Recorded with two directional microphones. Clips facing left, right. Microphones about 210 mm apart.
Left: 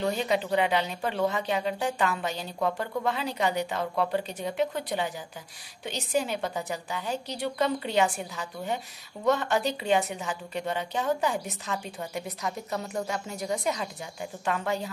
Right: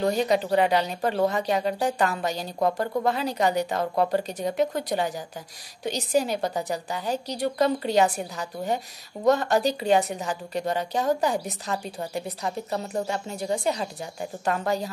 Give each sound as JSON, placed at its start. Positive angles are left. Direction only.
{"t": 0.0, "sound": "a woman's voice", "side_deg": -40}